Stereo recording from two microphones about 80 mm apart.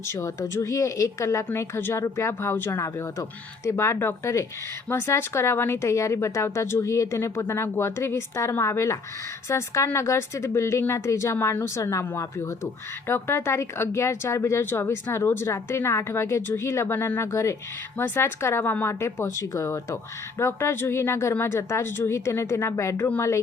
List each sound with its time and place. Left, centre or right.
0.1 s speech: left
17.9 s speech: left
18.9 s speech: left